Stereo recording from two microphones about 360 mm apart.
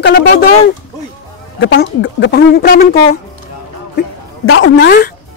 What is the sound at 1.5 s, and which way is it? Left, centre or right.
Speech, left.